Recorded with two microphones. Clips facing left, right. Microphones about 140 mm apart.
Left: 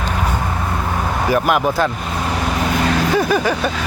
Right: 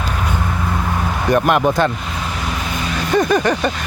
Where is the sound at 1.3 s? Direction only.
5° left (ahead or behind).